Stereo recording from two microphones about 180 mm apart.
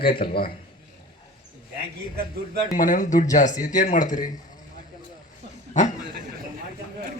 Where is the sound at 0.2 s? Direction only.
35° left (ahead or behind).